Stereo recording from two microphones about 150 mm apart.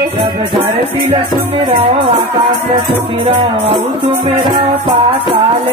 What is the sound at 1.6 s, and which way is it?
Music, 35° right (ahead or behind).